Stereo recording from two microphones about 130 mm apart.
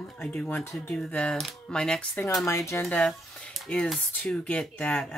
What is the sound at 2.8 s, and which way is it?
Speech, 5° left (ahead or behind).